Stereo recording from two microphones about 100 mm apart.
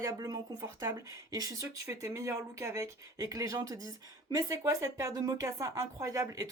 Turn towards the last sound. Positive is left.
turn(degrees=-35)  # may be behind; listen again after turning